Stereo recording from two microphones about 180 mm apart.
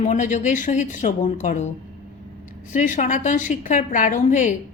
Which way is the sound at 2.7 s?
45° left (ahead or behind).